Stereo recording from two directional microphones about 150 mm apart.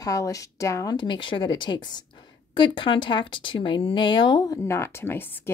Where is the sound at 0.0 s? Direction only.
20° left (ahead or behind).